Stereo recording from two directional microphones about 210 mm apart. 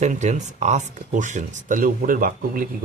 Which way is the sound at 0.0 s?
35° right (ahead or behind).